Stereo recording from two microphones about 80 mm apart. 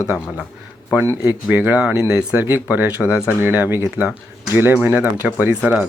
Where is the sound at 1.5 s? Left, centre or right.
Centre.